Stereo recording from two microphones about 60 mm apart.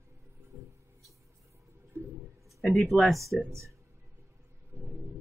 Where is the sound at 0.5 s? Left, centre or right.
Right.